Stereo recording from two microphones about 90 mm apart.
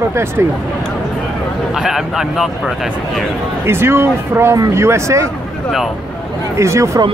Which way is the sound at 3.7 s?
25° right (ahead or behind).